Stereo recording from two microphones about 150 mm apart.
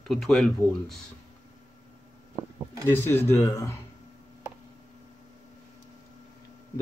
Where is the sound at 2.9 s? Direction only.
15° left (ahead or behind).